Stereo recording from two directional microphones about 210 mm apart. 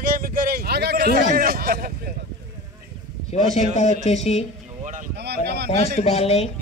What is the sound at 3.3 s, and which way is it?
Speech, 35° left (ahead or behind).